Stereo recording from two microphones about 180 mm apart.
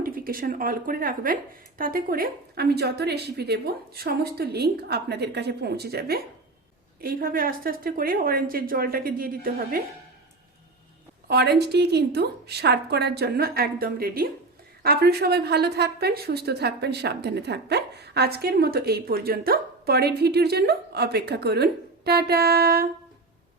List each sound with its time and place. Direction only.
0.0 s a woman's voice: 55° right (ahead or behind)
11.3 s a woman's voice: 65° right (ahead or behind)